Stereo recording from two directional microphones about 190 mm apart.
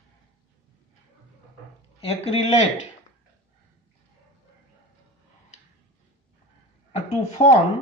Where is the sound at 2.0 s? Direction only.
30° left (ahead or behind).